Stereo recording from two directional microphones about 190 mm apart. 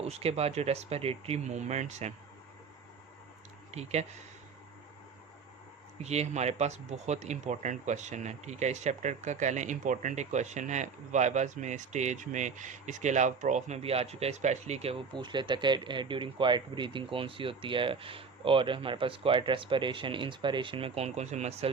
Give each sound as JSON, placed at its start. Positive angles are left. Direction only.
{"t": 0.0, "sound": "speech", "side_deg": -30}
{"t": 3.7, "sound": "speech", "side_deg": -35}
{"t": 6.0, "sound": "speech", "side_deg": -35}